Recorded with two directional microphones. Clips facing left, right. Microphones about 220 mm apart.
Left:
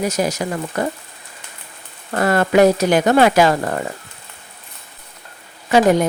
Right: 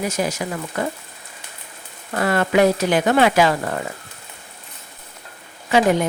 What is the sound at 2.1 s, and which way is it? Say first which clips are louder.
Speech: left 3 dB; 40° left (ahead or behind).